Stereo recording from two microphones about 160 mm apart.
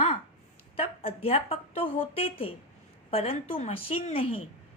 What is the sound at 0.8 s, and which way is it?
A woman's voice, 35° left (ahead or behind).